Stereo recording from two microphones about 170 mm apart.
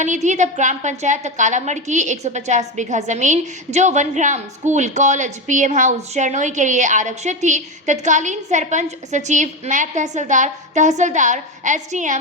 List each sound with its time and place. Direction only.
0.0 s a woman's voice: 45° right (ahead or behind)